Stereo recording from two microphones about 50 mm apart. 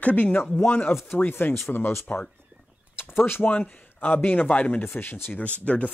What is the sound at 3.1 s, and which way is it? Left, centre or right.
Speech, left.